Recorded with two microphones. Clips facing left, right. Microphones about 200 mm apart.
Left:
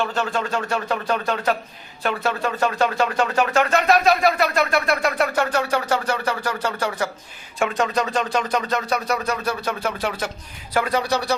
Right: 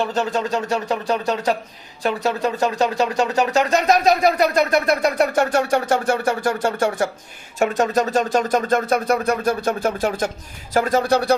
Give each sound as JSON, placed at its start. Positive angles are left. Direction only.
{"t": 0.0, "sound": "speech", "side_deg": -20}
{"t": 4.4, "sound": "a sound", "side_deg": -40}
{"t": 5.3, "sound": "speech", "side_deg": -45}